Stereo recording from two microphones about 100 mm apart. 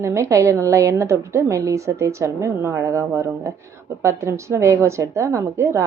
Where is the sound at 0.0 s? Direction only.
30° right (ahead or behind).